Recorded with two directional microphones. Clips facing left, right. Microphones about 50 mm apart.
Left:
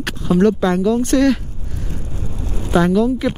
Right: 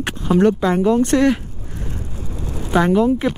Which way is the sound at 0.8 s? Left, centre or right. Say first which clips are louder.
Right 1 dB; right.